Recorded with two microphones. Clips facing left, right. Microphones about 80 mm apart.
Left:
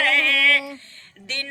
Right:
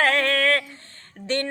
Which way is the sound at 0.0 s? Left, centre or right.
Right.